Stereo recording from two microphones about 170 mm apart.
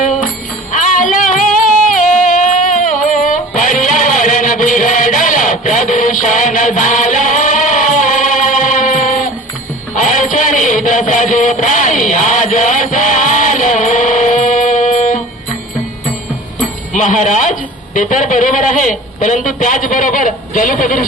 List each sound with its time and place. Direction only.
0.7 s music: 50° left (ahead or behind)
16.9 s a man's voice: 45° left (ahead or behind)